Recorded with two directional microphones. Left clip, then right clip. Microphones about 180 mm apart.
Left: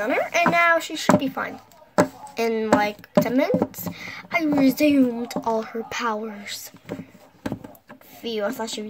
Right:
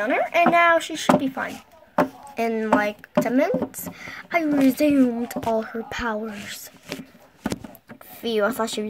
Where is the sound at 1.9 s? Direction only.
5° right (ahead or behind).